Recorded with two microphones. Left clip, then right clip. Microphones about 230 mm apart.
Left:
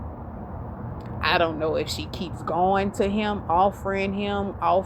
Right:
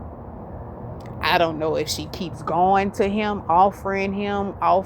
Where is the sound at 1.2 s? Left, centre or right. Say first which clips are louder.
Right 2 dB; right.